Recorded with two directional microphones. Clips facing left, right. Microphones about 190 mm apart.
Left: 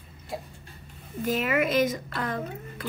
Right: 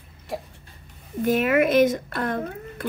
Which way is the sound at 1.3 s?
55° right (ahead or behind).